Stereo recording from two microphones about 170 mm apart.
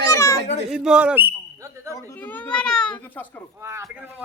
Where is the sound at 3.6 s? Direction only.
15° right (ahead or behind).